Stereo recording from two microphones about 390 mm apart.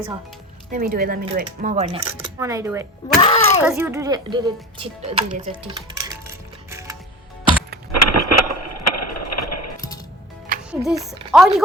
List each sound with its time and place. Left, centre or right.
0.7 s speech: right
3.2 s speech: centre
3.6 s speech: centre
6.7 s music: centre
7.9 s a sound: left
10.7 s speech: centre
11.0 s speech: centre
11.3 s speech: centre